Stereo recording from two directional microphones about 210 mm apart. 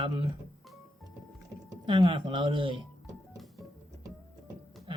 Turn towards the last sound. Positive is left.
turn(degrees=0)  # may be behind; listen again after turning